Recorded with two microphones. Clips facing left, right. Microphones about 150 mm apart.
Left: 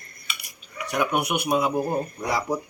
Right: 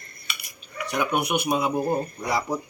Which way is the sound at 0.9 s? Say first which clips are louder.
Even; 10° left (ahead or behind).